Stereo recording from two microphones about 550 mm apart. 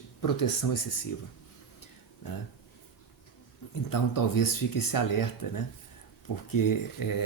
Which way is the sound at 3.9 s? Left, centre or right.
Left.